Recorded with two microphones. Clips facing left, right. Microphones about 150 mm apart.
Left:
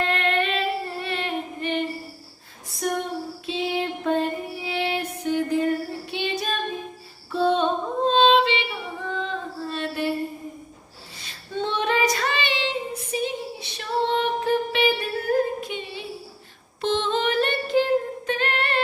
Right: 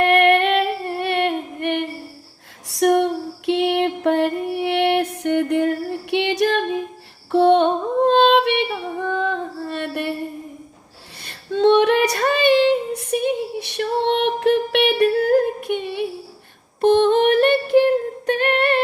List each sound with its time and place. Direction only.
0.0 s singing: 65° right (ahead or behind)
2.6 s music: 75° right (ahead or behind)
6.1 s female singing: 70° right (ahead or behind)
11.2 s female singing: 65° right (ahead or behind)
18.3 s singing: 60° right (ahead or behind)